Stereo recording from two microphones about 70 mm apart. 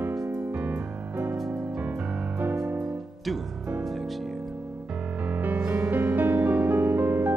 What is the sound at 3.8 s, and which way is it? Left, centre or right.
Music, centre.